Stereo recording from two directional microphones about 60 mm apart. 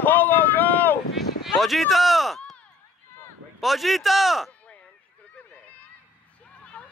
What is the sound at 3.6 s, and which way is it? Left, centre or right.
Speech, centre.